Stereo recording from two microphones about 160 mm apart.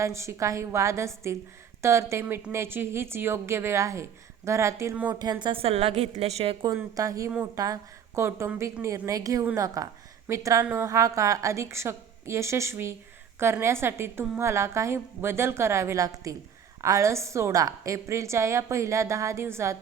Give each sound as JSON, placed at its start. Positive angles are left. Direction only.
{"t": 0.0, "sound": "a woman's voice", "side_deg": -20}
{"t": 5.2, "sound": "a woman's voice", "side_deg": -25}
{"t": 6.7, "sound": "a woman's voice", "side_deg": -20}